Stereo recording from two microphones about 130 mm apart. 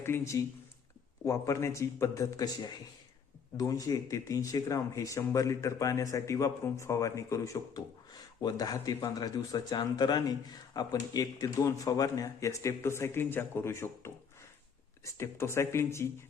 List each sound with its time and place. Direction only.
0.0 s speech: 20° left (ahead or behind)